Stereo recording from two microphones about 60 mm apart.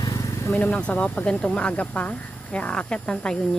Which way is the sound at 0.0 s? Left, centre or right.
Left.